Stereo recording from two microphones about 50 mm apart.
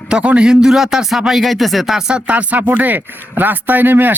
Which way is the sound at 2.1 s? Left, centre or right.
Right.